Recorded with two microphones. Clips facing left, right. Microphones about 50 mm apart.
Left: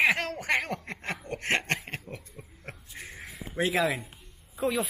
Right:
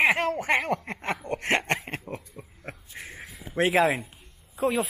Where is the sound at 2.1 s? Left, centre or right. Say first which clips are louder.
Right 5 dB; right.